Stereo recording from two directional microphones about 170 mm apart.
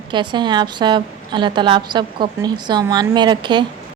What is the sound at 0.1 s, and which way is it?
A woman's voice, 25° right (ahead or behind).